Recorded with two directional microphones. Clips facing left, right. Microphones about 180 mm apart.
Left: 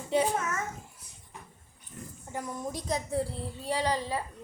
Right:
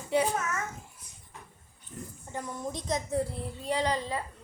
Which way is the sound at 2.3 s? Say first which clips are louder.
Left 1 dB; 10° left (ahead or behind).